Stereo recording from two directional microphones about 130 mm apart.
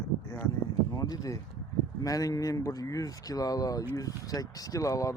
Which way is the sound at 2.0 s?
25° left (ahead or behind).